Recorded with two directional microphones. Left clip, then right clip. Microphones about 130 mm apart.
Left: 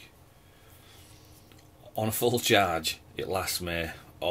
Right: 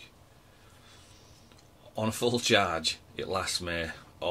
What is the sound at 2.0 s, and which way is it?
Speech, 15° left (ahead or behind).